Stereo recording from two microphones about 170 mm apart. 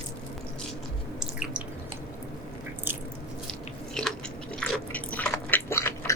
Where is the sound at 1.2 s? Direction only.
5° right (ahead or behind).